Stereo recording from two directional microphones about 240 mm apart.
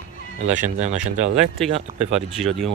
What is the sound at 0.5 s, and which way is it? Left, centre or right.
Speech, right.